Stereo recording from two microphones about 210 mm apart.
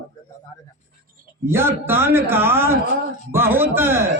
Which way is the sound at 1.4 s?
10° right (ahead or behind).